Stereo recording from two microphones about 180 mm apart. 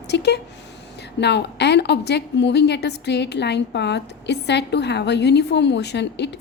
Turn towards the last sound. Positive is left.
turn(degrees=70)  # may be behind; listen again after turning